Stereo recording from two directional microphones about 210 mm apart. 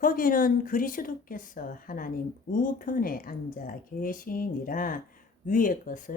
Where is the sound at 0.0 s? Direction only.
40° left (ahead or behind).